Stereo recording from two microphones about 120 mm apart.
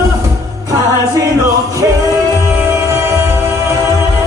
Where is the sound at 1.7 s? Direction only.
30° right (ahead or behind).